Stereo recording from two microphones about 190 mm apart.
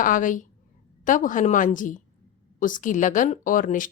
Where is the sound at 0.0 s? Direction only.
45° left (ahead or behind).